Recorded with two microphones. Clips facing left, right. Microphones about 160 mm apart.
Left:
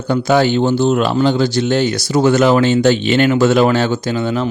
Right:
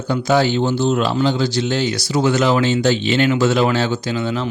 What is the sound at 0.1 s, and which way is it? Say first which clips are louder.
Speech: left 3 dB; 55° left (ahead or behind).